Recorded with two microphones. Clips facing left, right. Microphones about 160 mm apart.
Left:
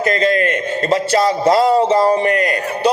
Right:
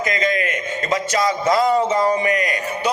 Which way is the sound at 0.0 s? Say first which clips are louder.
Left 6 dB; 30° left (ahead or behind).